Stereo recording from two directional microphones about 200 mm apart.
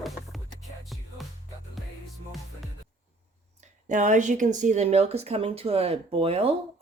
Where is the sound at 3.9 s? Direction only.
40° right (ahead or behind).